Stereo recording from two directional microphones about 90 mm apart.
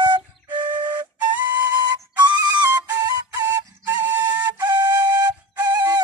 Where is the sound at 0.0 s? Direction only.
55° right (ahead or behind).